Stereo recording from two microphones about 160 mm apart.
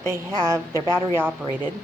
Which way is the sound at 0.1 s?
15° right (ahead or behind).